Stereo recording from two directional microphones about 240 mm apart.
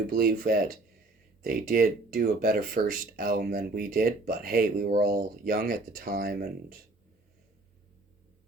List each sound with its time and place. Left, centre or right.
0.1 s speech: right